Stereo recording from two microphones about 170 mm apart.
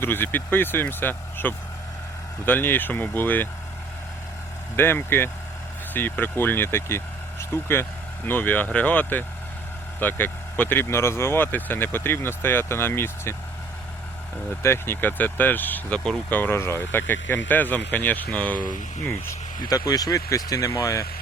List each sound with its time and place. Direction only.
0.0 s speech: 10° left (ahead or behind)
4.8 s speech: 15° left (ahead or behind)
14.6 s speech: 15° left (ahead or behind)